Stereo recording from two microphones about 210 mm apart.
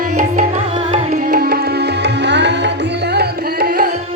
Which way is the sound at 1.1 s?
45° right (ahead or behind).